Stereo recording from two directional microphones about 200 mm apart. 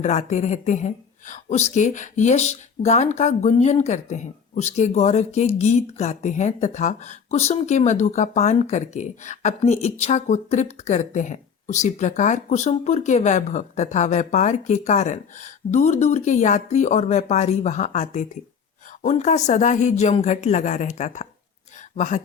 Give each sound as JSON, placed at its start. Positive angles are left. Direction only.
{"t": 0.0, "sound": "speech", "side_deg": 35}